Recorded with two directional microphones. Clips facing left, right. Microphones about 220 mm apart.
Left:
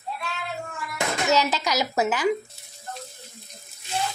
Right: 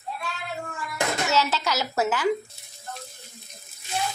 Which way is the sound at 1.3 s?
15° left (ahead or behind).